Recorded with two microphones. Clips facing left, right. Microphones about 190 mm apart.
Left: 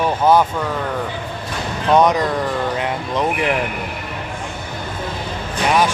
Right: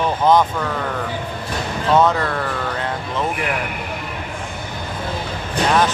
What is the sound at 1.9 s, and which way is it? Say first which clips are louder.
Speech: left 2 dB; 15° left (ahead or behind).